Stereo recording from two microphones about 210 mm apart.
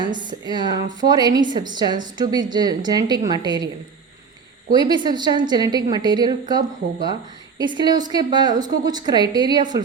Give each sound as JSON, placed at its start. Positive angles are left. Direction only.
{"t": 0.0, "sound": "a woman's voice", "side_deg": -20}
{"t": 4.7, "sound": "a woman's voice", "side_deg": -20}